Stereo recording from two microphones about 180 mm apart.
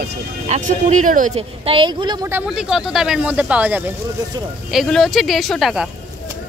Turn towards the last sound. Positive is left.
turn(degrees=0)  # may be behind; listen again after turning